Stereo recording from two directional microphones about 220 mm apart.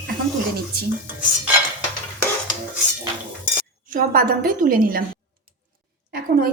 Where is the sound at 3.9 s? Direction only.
40° right (ahead or behind).